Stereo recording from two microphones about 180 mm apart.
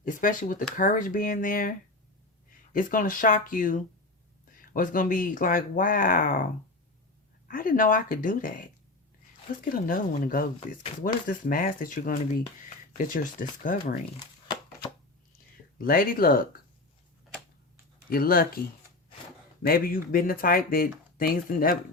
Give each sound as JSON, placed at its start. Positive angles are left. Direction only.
{"t": 0.0, "sound": "speech", "side_deg": 45}
{"t": 2.7, "sound": "speech", "side_deg": 50}
{"t": 15.8, "sound": "speech", "side_deg": 55}
{"t": 18.1, "sound": "speech", "side_deg": 55}
{"t": 19.6, "sound": "speech", "side_deg": 55}